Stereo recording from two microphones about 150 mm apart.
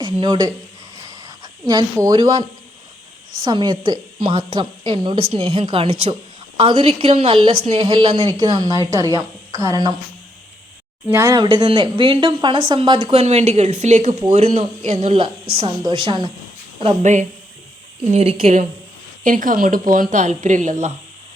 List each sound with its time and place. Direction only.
0.0 s a woman's voice: 30° right (ahead or behind)
3.4 s speech: 30° right (ahead or behind)
8.4 s a woman's voice: 25° right (ahead or behind)
11.1 s speech: 25° right (ahead or behind)
17.0 s a woman's voice: 55° right (ahead or behind)
19.2 s a woman's voice: 60° right (ahead or behind)